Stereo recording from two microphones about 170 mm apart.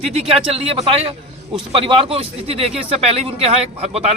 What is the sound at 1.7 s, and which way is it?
A man's voice, 35° right (ahead or behind).